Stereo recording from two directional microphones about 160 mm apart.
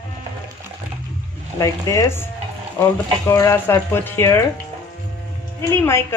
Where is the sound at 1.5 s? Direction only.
20° left (ahead or behind).